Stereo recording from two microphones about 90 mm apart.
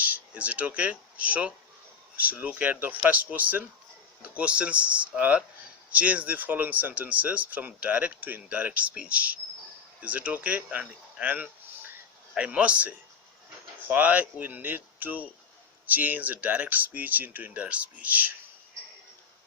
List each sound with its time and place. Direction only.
0.0 s speech: 15° right (ahead or behind)